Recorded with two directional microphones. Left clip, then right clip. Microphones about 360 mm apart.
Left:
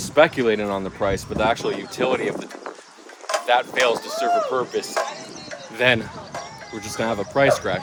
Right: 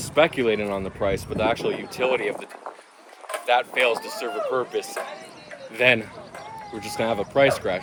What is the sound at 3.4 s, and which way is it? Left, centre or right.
Speech, centre.